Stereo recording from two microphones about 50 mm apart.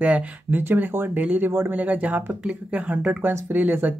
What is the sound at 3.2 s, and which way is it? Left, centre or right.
Speech, right.